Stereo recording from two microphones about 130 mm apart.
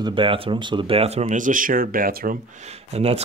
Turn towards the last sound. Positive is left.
turn(degrees=-55)  # may be behind; listen again after turning